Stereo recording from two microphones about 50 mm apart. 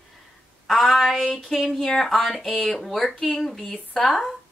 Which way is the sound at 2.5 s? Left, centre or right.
Centre.